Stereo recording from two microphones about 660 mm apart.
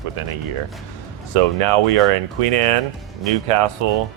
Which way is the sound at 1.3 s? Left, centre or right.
Right.